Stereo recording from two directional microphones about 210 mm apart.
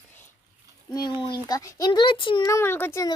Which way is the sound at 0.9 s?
20° left (ahead or behind).